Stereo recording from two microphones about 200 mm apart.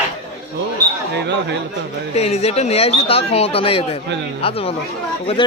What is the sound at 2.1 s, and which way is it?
Speech, 30° left (ahead or behind).